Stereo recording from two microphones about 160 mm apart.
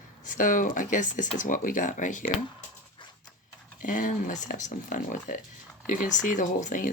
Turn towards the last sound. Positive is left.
turn(degrees=55)  # may be behind; listen again after turning